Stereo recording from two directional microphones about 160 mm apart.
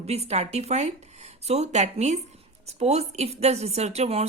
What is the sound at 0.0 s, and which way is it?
Speech, 40° right (ahead or behind).